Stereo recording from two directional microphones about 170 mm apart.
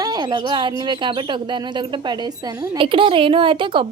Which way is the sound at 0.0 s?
25° right (ahead or behind).